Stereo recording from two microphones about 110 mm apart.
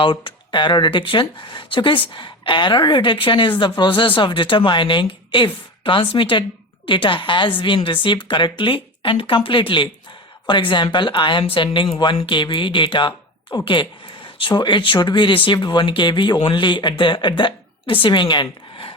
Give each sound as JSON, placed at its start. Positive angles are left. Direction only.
{"t": 0.0, "sound": "speech", "side_deg": 45}